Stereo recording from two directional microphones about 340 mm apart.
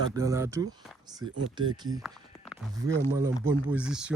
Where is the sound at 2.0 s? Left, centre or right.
Centre.